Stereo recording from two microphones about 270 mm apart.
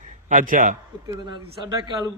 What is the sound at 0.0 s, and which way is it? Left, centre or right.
Speech, right.